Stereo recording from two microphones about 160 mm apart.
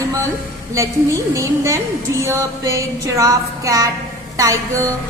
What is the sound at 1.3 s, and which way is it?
A woman's voice, 20° right (ahead or behind).